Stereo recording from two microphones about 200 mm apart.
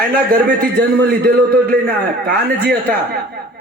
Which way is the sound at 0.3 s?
50° right (ahead or behind).